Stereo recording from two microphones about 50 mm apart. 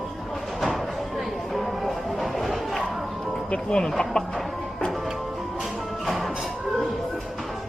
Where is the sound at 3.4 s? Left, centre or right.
Centre.